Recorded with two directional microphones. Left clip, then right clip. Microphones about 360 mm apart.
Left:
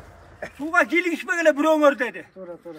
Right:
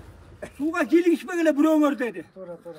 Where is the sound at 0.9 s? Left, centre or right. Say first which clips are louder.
Right 1 dB; centre.